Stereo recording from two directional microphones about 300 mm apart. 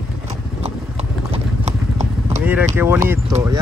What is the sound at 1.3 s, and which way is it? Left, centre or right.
Clip-clop, right.